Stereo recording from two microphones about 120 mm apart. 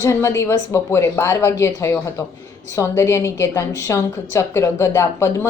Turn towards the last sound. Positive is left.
turn(degrees=25)  # may be behind; listen again after turning